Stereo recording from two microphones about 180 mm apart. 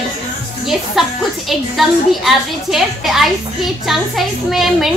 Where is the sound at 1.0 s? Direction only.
Centre (ahead or behind).